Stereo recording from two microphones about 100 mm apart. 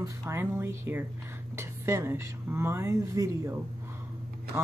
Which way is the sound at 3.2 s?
35° right (ahead or behind).